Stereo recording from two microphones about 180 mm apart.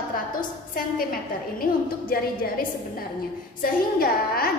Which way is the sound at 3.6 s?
55° left (ahead or behind).